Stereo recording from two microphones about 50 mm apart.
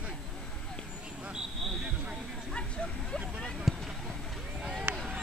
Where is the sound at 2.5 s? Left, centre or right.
Left.